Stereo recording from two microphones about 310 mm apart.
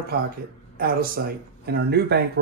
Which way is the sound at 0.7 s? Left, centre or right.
Right.